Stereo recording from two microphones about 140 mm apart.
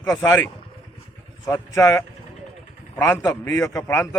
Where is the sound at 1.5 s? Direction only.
20° left (ahead or behind).